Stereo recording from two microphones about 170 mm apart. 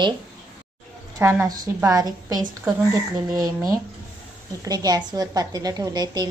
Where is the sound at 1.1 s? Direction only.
15° right (ahead or behind).